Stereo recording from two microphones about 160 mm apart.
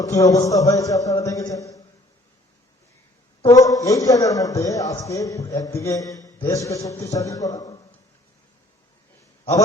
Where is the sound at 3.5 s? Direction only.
20° left (ahead or behind).